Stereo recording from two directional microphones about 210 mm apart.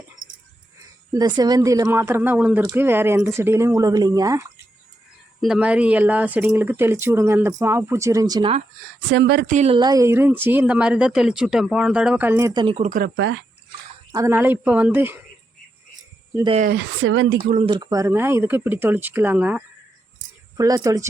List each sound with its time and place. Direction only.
1.4 s speech: 20° right (ahead or behind)
5.4 s speech: 5° right (ahead or behind); by 8.5 s 20° right (ahead or behind)
9.0 s speech: 50° right (ahead or behind)
9.5 s speech: 30° right (ahead or behind); by 12.6 s 15° right (ahead or behind)
12.6 s speech: 30° right (ahead or behind)
13.1 s speech: 60° right (ahead or behind)
14.1 s speech: 15° right (ahead or behind)
16.3 s speech: 20° right (ahead or behind)
16.6 s speech: 50° right (ahead or behind)
17.7 s speech: 20° right (ahead or behind)